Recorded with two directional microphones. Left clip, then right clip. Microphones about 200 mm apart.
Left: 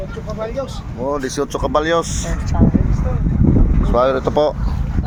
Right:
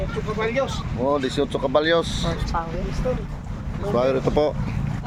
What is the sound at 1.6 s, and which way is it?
Speech, 15° left (ahead or behind).